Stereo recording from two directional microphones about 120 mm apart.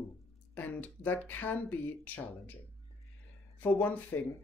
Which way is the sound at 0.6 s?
15° left (ahead or behind).